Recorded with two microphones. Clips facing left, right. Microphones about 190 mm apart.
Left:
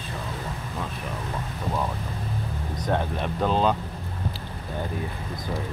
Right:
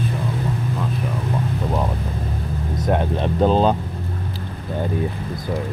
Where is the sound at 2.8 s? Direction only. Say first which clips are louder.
Right 6 dB; 25° right (ahead or behind).